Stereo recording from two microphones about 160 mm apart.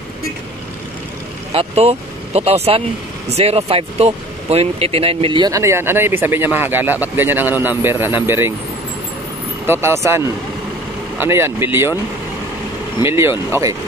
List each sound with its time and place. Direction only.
1.5 s speech: 40° right (ahead or behind)
5.5 s speech: 15° right (ahead or behind)
9.7 s speech: 15° right (ahead or behind)
13.0 s speech: 15° right (ahead or behind)